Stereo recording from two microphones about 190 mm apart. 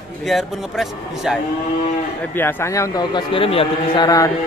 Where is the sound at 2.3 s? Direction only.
15° left (ahead or behind).